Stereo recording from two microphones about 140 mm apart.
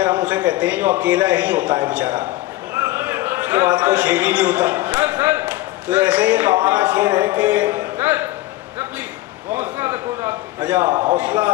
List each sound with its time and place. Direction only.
0.0 s a sound: 10° right (ahead or behind)
0.5 s a man's voice: 10° right (ahead or behind)
2.7 s a sound: 20° right (ahead or behind)
3.8 s a man's voice: 15° right (ahead or behind)
9.5 s a man's voice: 15° right (ahead or behind)
10.9 s a man's voice: 30° right (ahead or behind)
11.1 s a man's voice: 10° right (ahead or behind)